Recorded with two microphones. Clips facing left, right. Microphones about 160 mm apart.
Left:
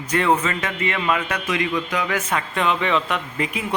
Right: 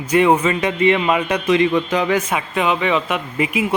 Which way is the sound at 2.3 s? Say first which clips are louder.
Right 3 dB; 5° right (ahead or behind).